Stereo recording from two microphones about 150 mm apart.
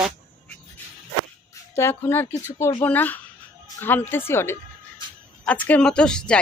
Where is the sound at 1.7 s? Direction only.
15° left (ahead or behind).